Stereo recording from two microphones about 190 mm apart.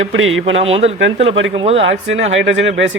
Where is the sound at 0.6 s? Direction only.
30° right (ahead or behind).